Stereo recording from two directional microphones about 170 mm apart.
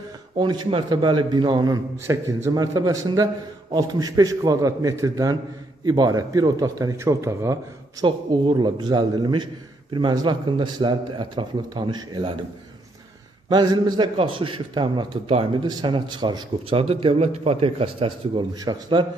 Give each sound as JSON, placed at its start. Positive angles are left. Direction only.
{"t": 0.4, "sound": "a man's voice", "side_deg": -25}
{"t": 13.5, "sound": "a man's voice", "side_deg": -25}